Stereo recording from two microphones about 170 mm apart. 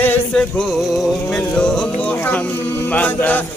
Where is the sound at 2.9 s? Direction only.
10° left (ahead or behind).